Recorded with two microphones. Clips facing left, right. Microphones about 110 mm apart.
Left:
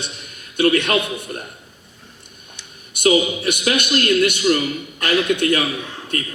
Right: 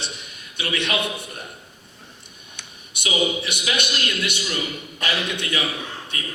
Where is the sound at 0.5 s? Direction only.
50° left (ahead or behind).